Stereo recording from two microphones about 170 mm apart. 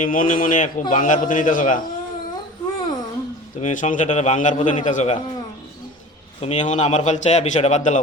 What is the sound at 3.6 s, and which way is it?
A man's voice, 45° left (ahead or behind).